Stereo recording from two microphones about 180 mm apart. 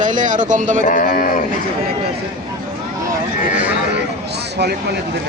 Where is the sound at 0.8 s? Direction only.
50° left (ahead or behind).